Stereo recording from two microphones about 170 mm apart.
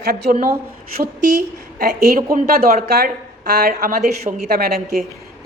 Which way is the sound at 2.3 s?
60° right (ahead or behind).